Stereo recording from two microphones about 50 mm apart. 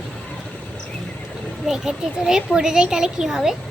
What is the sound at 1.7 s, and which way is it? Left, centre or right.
Speech, centre.